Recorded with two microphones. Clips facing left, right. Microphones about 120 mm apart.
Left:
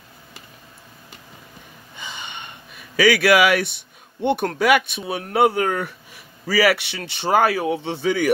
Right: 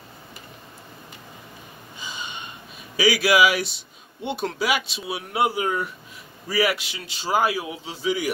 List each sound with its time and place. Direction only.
2.0 s speech: 65° left (ahead or behind)